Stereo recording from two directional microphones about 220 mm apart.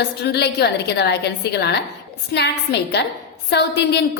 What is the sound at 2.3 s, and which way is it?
Speech, 50° left (ahead or behind).